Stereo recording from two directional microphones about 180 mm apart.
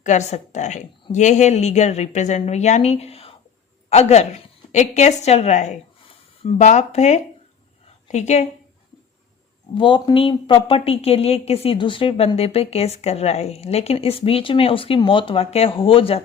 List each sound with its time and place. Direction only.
0.0 s a woman's voice: 40° left (ahead or behind)
9.7 s a woman's voice: 25° left (ahead or behind)